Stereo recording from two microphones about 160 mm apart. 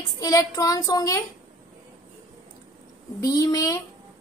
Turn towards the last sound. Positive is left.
turn(degrees=20)  # may be behind; listen again after turning